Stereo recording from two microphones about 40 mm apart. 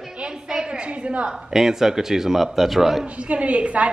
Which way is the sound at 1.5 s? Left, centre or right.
Centre.